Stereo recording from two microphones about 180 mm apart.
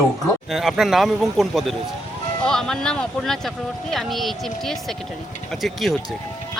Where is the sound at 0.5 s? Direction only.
Centre (ahead or behind).